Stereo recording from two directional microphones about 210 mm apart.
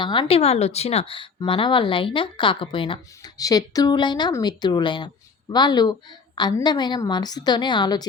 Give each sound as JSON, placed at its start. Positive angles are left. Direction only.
{"t": 0.0, "sound": "a woman's voice", "side_deg": 20}